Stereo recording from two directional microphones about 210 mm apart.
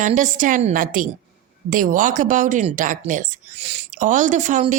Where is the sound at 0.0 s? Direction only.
35° right (ahead or behind).